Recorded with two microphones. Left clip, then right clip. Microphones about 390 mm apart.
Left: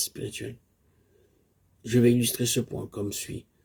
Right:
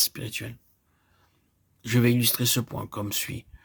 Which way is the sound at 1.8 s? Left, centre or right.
Right.